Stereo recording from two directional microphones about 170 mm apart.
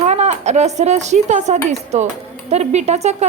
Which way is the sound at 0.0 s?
40° right (ahead or behind).